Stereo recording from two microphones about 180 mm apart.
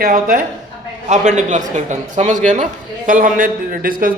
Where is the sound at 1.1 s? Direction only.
40° right (ahead or behind).